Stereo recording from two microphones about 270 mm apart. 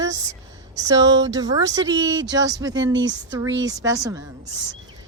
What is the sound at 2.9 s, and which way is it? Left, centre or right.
Speech, right.